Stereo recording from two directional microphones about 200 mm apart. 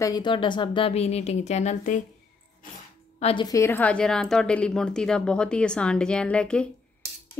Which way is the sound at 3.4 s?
15° left (ahead or behind).